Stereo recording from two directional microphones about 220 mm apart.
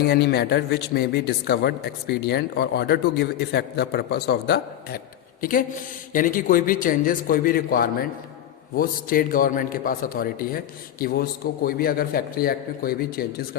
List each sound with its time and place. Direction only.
0.0 s a man's voice: 45° left (ahead or behind)